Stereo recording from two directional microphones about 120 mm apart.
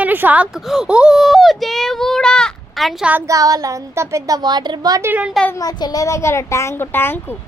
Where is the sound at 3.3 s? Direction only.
30° right (ahead or behind).